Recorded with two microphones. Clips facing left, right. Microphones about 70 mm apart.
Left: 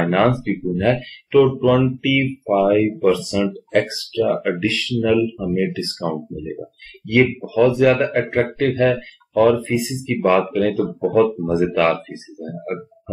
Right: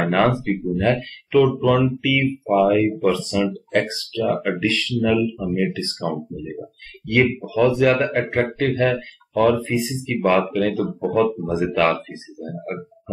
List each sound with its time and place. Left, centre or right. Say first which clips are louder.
0.0 s speech: left 2 dB; centre
3.2 s speech: left 1 dB; centre
4.2 s speech: left 2 dB; centre